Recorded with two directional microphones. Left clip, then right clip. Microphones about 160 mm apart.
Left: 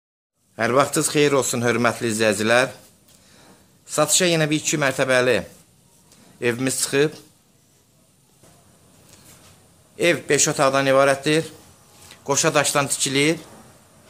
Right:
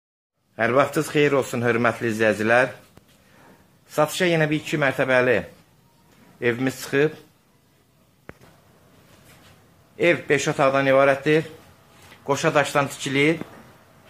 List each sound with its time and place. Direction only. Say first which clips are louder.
0.6 s speech: left 1 dB; 5° left (ahead or behind)
3.9 s speech: left 2 dB; 10° left (ahead or behind)
6.4 s speech: left 1 dB; 10° left (ahead or behind)
9.9 s speech: left 1 dB; 10° left (ahead or behind)
12.4 s speech: even; 10° left (ahead or behind)